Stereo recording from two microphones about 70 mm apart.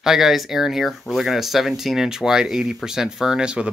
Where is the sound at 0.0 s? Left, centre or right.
Centre.